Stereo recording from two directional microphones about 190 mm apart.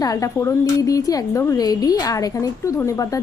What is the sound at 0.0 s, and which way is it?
A woman's voice, 20° left (ahead or behind).